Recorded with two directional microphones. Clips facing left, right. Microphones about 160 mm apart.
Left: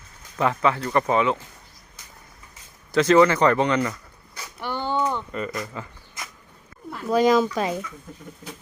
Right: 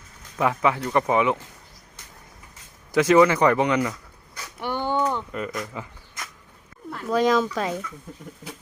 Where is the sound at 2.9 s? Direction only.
10° right (ahead or behind).